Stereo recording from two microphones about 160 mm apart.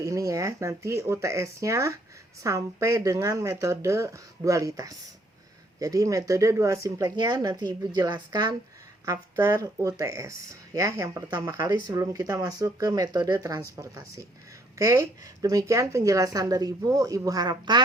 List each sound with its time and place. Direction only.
0.0 s speech: 20° right (ahead or behind)